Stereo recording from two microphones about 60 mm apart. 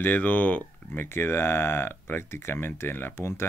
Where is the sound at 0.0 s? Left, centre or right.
Left.